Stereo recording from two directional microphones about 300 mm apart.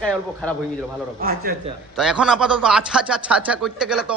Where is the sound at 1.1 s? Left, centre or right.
Right.